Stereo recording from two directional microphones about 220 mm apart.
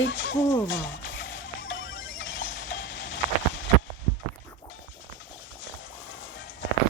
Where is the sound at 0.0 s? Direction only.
60° left (ahead or behind).